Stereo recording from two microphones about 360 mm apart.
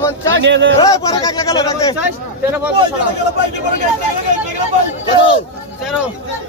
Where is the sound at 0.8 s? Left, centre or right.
Centre.